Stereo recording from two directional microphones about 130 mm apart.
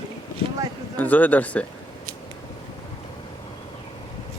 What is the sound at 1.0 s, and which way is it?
Speech, 15° left (ahead or behind).